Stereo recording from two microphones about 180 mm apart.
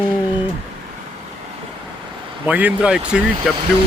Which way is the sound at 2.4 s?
10° right (ahead or behind).